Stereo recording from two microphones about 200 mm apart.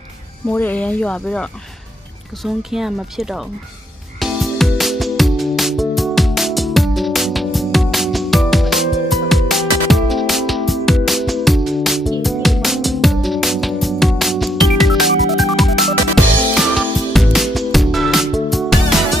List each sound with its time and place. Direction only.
0.5 s speech: 10° left (ahead or behind)
4.2 s music: centre (ahead or behind)